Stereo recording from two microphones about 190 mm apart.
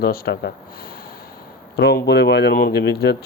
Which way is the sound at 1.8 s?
65° left (ahead or behind).